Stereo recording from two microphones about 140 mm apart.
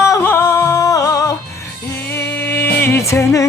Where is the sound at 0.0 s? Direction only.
20° left (ahead or behind).